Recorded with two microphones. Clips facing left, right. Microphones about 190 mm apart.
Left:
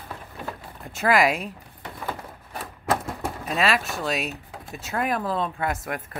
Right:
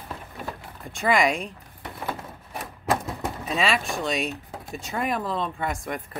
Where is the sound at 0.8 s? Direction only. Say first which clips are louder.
Left 1 dB; 5° left (ahead or behind).